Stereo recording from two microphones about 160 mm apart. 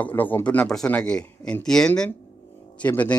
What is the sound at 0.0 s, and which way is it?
Speech, 10° left (ahead or behind).